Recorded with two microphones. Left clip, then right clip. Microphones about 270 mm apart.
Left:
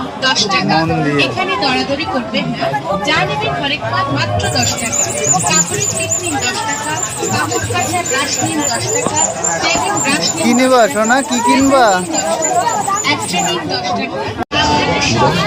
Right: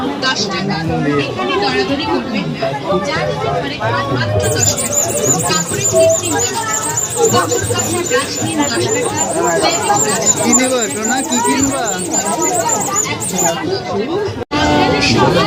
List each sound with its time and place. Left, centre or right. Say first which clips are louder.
0.3 s speech: left 7 dB; left
10.5 s speech: left 5 dB; centre